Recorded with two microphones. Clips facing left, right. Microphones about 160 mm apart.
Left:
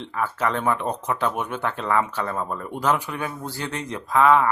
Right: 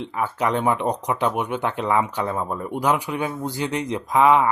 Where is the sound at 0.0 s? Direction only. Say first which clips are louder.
Right 2 dB; 15° right (ahead or behind).